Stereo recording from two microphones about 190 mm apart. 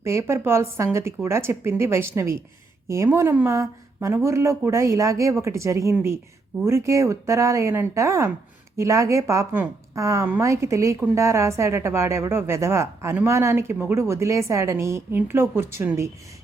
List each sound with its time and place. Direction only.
0.0 s a woman's voice: 15° right (ahead or behind)